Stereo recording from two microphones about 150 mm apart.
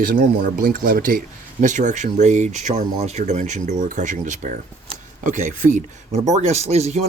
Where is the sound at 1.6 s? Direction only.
55° right (ahead or behind).